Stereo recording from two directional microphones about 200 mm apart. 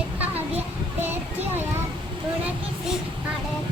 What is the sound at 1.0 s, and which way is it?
Speech, 10° right (ahead or behind).